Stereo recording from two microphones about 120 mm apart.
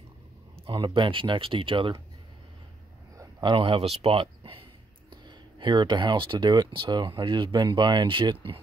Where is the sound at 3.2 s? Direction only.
40° right (ahead or behind).